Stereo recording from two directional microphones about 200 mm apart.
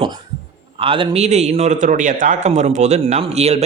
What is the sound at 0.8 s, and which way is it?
A man's voice, 25° right (ahead or behind).